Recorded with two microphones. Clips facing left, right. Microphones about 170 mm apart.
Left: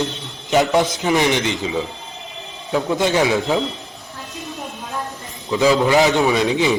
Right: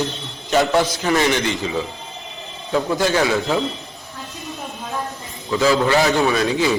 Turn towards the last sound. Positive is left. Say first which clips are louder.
# left 1 dB
turn(degrees=20)  # may be behind; listen again after turning